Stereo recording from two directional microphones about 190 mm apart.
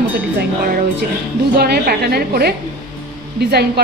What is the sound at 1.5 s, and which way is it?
A woman's voice, 55° right (ahead or behind).